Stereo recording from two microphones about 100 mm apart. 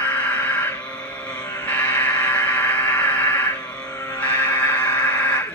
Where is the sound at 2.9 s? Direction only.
10° left (ahead or behind).